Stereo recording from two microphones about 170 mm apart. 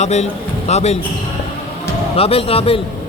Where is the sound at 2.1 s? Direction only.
35° left (ahead or behind).